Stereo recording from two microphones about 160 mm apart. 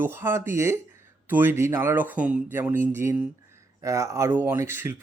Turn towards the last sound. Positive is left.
turn(degrees=-15)  # may be behind; listen again after turning